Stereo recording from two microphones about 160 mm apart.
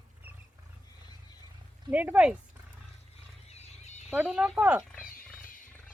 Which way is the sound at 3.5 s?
45° left (ahead or behind).